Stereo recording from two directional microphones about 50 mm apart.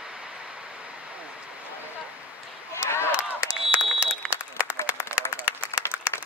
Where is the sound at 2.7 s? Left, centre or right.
Left.